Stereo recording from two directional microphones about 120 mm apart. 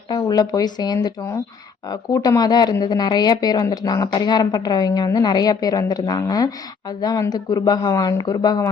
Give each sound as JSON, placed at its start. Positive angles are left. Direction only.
{"t": 0.1, "sound": "speech", "side_deg": 35}